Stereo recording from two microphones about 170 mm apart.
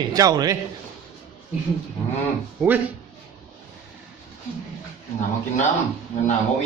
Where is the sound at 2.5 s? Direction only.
10° right (ahead or behind).